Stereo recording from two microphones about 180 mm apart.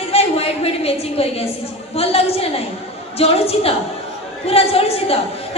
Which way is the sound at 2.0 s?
35° left (ahead or behind).